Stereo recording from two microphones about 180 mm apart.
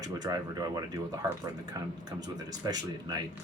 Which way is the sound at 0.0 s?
20° right (ahead or behind).